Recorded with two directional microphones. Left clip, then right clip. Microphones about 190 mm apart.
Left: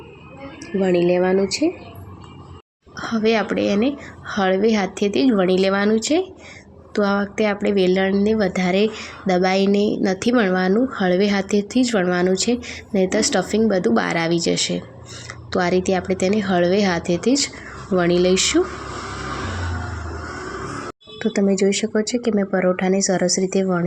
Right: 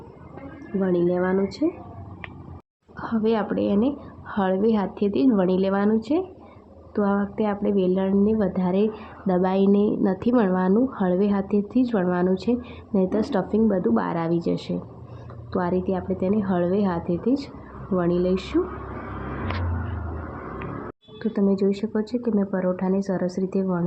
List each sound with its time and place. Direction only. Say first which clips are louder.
0.8 s a woman's voice: left 5 dB; 10° left (ahead or behind)
3.0 s a woman's voice: left 4 dB; 10° left (ahead or behind)
21.2 s a woman's voice: left 4 dB; 15° left (ahead or behind)